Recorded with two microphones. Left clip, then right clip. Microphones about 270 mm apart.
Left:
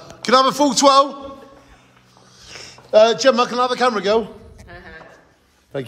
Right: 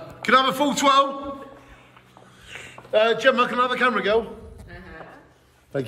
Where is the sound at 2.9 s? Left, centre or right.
Centre.